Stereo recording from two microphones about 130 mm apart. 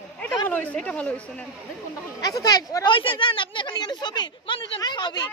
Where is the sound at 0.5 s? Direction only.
10° left (ahead or behind).